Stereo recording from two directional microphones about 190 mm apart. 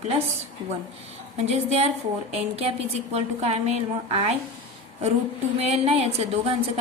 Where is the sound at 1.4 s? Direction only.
35° right (ahead or behind).